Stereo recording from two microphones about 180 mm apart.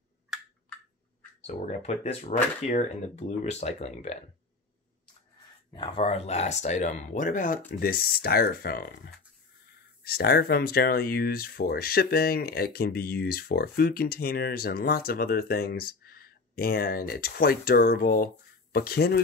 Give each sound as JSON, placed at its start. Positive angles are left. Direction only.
{"t": 1.5, "sound": "speech", "side_deg": 40}
{"t": 5.7, "sound": "speech", "side_deg": 30}